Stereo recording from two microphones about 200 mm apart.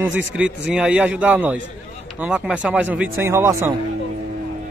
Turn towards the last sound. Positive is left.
turn(degrees=-15)  # may be behind; listen again after turning